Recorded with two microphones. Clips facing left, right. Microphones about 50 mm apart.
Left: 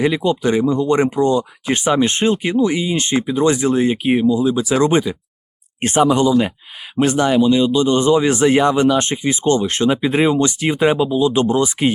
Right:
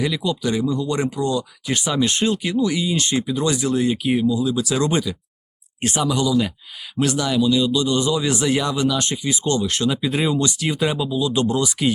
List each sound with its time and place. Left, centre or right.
0.0 s speech: left